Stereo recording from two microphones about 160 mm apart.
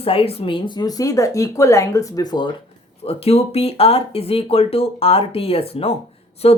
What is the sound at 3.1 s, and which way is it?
Speech, 40° left (ahead or behind).